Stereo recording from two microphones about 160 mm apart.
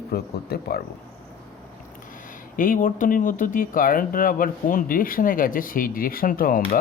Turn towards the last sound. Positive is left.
turn(degrees=65)  # may be behind; listen again after turning